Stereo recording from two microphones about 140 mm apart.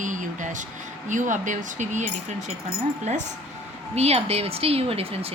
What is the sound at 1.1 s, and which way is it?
A woman's voice, 65° right (ahead or behind).